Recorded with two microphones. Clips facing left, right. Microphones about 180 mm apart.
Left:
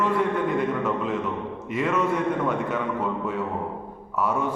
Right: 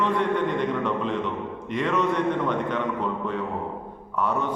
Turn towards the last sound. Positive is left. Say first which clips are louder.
# left 1 dB
turn(degrees=10)  # may be behind; listen again after turning